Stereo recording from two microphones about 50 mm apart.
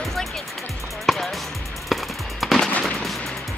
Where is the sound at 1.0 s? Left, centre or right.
Centre.